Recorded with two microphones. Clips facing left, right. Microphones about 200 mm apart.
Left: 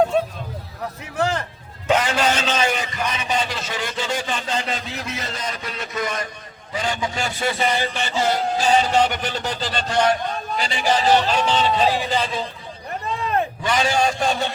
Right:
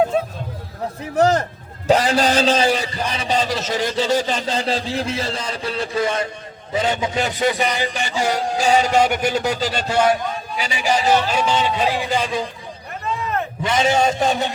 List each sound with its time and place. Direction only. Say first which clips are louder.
1.1 s a man's voice: right 7 dB; 40° right (ahead or behind); by 12.5 s 15° right (ahead or behind)
13.6 s a man's voice: right 5 dB; 25° right (ahead or behind)